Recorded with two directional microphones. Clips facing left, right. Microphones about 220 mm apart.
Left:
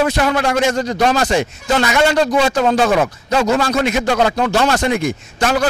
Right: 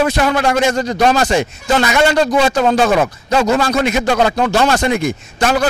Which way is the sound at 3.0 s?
25° right (ahead or behind).